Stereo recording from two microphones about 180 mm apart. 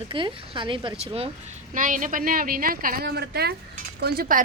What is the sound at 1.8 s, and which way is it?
A woman's voice, 45° right (ahead or behind).